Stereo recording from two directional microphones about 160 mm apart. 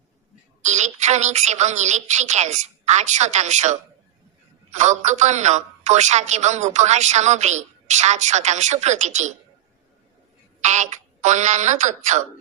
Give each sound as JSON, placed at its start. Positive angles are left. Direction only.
{"t": 0.6, "sound": "a woman's voice", "side_deg": -45}
{"t": 4.8, "sound": "a woman's voice", "side_deg": -45}
{"t": 10.6, "sound": "a woman's voice", "side_deg": -45}